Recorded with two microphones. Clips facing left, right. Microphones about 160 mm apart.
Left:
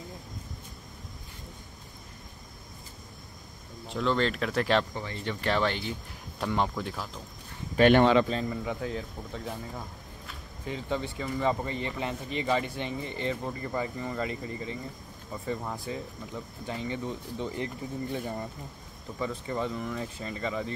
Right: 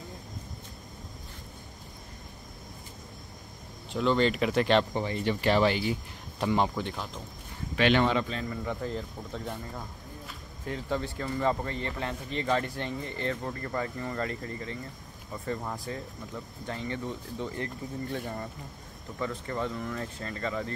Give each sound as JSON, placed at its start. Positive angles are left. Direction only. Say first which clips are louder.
{"t": 3.9, "sound": "speech", "louder": "right 2 dB", "side_deg": 0}
{"t": 4.9, "sound": "speech", "louder": "right 6 dB", "side_deg": -20}
{"t": 5.4, "sound": "speech", "louder": "right 3 dB", "side_deg": -5}
{"t": 7.7, "sound": "speech", "louder": "left 4 dB", "side_deg": 50}
{"t": 8.3, "sound": "speech", "louder": "left 4 dB", "side_deg": 35}
{"t": 8.6, "sound": "speech", "louder": "even", "side_deg": 5}
{"t": 16.6, "sound": "speech", "louder": "left 1 dB", "side_deg": 15}